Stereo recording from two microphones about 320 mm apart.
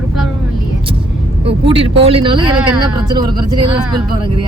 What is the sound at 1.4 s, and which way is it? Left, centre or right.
Speech, centre.